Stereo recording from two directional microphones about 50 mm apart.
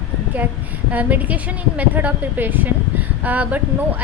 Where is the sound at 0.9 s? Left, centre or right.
Right.